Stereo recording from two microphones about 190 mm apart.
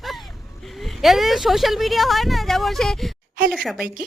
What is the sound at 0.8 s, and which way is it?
A woman's voice, centre (ahead or behind).